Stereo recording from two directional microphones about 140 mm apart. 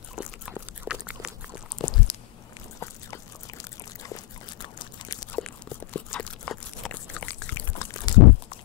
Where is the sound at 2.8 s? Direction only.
25° left (ahead or behind).